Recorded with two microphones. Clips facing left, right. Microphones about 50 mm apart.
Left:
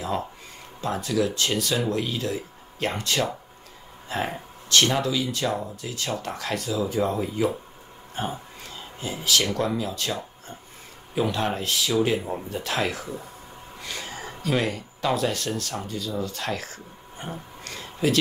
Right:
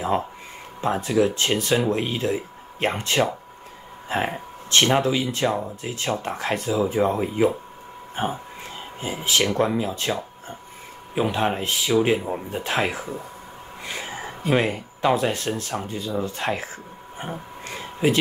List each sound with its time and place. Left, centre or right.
0.0 s speech: right